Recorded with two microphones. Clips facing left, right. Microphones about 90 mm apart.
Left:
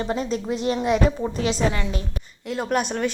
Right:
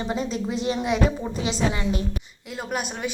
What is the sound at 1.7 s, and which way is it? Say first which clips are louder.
Speech: right 2 dB; 20° right (ahead or behind).